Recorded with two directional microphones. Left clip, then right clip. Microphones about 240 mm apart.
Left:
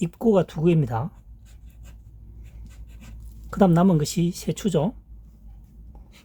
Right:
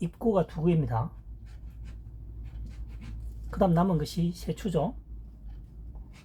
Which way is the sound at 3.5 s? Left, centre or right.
Left.